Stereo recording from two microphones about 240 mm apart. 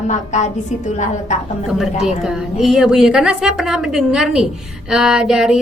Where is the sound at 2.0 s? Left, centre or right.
Centre.